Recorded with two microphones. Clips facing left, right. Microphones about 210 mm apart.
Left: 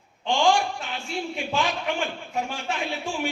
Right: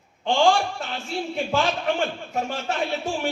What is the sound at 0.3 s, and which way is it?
A man's voice, 15° left (ahead or behind).